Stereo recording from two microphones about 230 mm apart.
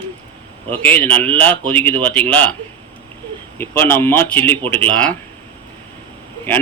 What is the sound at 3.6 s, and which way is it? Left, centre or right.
A man's voice, centre.